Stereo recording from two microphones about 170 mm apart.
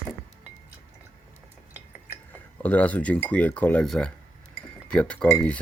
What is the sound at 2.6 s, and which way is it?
Speech, 10° left (ahead or behind).